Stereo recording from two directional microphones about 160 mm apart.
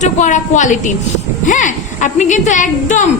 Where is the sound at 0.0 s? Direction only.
50° left (ahead or behind).